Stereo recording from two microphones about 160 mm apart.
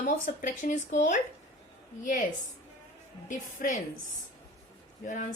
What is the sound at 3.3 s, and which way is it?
Speech, 55° left (ahead or behind).